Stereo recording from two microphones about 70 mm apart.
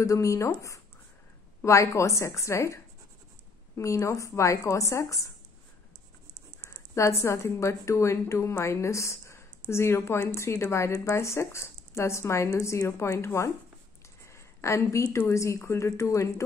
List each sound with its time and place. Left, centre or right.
0.0 s a woman's voice: left
1.6 s a woman's voice: left
6.6 s a woman's voice: left
14.2 s a sound: left
15.1 s a woman's voice: left